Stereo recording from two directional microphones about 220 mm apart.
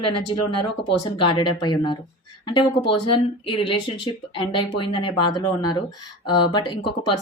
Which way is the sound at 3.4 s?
25° left (ahead or behind).